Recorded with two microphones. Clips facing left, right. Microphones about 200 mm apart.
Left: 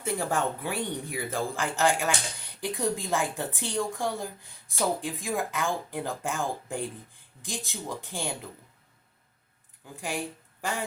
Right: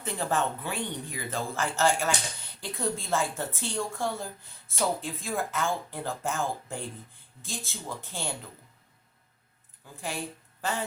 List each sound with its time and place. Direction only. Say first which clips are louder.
0.0 s speech: left 1 dB; 10° left (ahead or behind)
10.0 s a woman's voice: left 2 dB; 15° left (ahead or behind)